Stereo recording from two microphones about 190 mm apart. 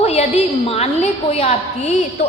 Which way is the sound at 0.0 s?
35° left (ahead or behind).